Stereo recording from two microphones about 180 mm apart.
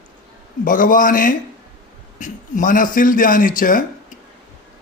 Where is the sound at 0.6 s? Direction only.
50° left (ahead or behind).